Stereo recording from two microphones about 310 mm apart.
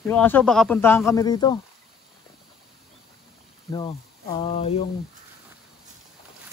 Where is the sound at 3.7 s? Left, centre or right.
Centre.